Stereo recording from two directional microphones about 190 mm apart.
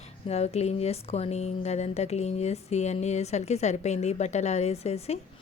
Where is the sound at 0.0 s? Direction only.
35° left (ahead or behind).